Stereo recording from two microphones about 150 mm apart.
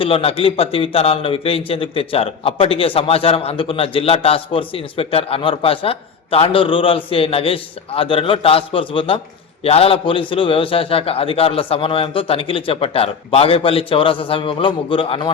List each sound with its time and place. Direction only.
0.0 s a man's voice: 40° left (ahead or behind)